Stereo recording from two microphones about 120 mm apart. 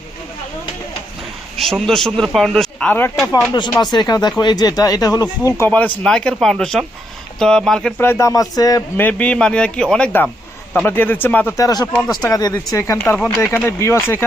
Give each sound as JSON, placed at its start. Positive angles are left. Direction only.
{"t": 1.5, "sound": "speech", "side_deg": 0}
{"t": 3.8, "sound": "speech", "side_deg": 35}
{"t": 5.5, "sound": "speech", "side_deg": 20}
{"t": 7.9, "sound": "speech", "side_deg": 20}
{"t": 9.0, "sound": "speech", "side_deg": 15}
{"t": 11.5, "sound": "speech", "side_deg": 30}
{"t": 11.9, "sound": "speech", "side_deg": 5}
{"t": 12.3, "sound": "speech", "side_deg": 30}
{"t": 13.0, "sound": "speech", "side_deg": 5}
{"t": 13.4, "sound": "speech", "side_deg": 20}